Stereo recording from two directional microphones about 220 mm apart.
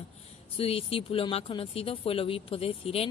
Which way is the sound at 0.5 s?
25° left (ahead or behind).